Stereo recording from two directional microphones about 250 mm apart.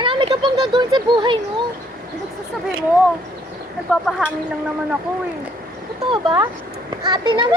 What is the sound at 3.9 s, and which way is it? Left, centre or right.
Speech, centre.